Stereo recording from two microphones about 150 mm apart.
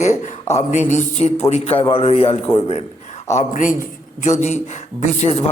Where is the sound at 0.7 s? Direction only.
50° left (ahead or behind).